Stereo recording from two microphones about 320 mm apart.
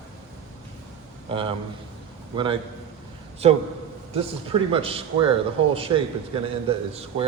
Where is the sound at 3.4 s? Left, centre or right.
Centre.